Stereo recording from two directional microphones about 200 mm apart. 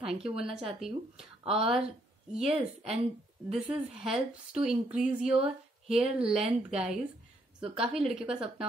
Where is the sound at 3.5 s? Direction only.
5° right (ahead or behind).